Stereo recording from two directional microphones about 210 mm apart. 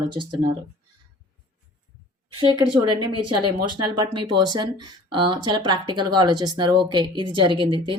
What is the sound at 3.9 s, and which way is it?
Speech, 20° right (ahead or behind).